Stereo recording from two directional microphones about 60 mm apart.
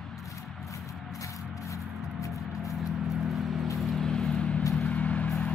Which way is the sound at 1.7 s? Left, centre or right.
Left.